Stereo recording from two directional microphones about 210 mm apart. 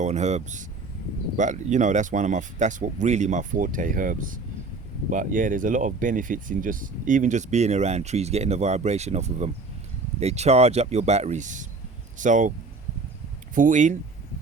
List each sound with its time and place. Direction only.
0.0 s speech: 30° right (ahead or behind)